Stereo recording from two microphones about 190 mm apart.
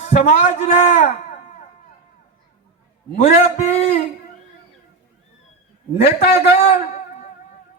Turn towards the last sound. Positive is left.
turn(degrees=30)  # may be behind; listen again after turning